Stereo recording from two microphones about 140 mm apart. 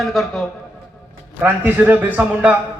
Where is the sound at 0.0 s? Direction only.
Centre (ahead or behind).